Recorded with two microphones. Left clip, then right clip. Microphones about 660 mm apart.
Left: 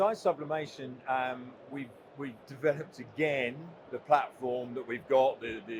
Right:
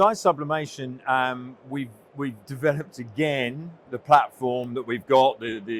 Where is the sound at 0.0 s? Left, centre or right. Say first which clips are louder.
Right 9 dB; right.